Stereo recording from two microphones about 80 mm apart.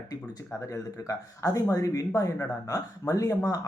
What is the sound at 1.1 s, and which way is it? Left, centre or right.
Speech, left.